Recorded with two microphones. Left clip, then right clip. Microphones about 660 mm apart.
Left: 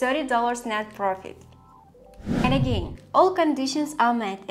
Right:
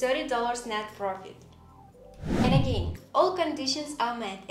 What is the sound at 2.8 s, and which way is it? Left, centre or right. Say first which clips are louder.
Speech: left 5 dB; left.